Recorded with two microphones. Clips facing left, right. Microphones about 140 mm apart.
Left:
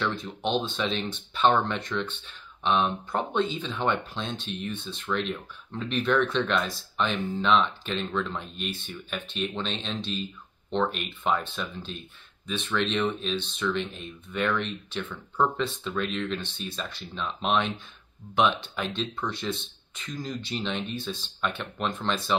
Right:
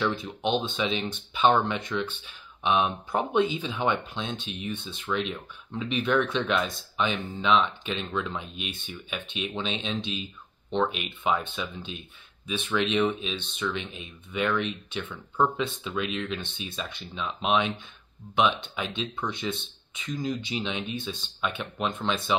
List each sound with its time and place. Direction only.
0.0 s speech: centre (ahead or behind)